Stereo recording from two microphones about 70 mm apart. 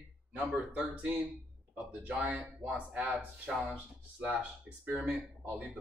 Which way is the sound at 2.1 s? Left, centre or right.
Centre.